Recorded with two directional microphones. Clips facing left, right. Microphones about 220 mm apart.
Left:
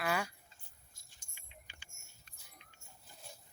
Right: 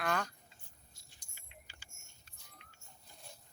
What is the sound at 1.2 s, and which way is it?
Keys jangling, 40° right (ahead or behind).